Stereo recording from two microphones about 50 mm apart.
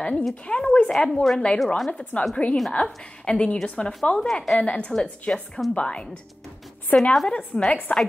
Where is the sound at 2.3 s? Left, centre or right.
Left.